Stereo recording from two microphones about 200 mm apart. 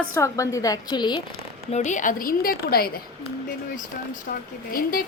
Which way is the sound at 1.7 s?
40° left (ahead or behind).